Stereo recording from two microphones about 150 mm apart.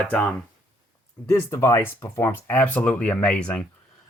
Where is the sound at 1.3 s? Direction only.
20° left (ahead or behind).